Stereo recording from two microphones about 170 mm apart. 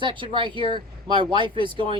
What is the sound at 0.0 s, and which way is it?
Speech, 30° right (ahead or behind).